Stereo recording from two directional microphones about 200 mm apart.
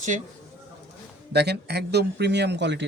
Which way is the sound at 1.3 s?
55° right (ahead or behind).